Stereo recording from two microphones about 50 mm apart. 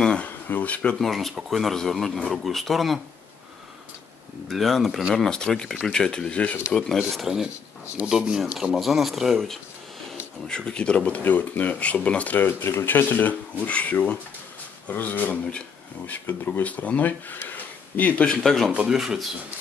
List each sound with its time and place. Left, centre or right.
0.2 s speech: left
0.9 s speech: centre
4.5 s speech: centre
5.1 s speech: centre
6.7 s speech: centre
7.0 s speech: centre
8.1 s speech: centre
8.7 s speech: centre
10.4 s speech: centre
12.4 s speech: left
17.5 s a sound: left
18.4 s speech: centre
18.9 s speech: centre